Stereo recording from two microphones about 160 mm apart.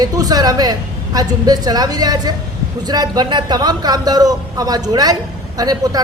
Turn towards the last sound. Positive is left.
turn(degrees=-25)  # may be behind; listen again after turning